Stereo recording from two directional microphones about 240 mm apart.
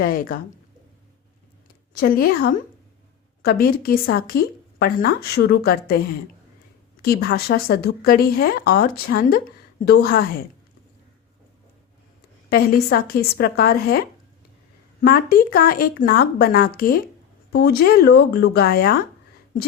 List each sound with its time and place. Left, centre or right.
0.0 s a woman's voice: left
1.9 s a woman's voice: left
12.5 s a woman's voice: left
15.0 s a woman's voice: left